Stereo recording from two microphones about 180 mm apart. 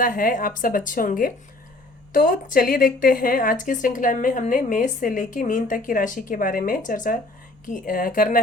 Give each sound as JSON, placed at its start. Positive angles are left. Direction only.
{"t": 0.0, "sound": "a woman's voice", "side_deg": 50}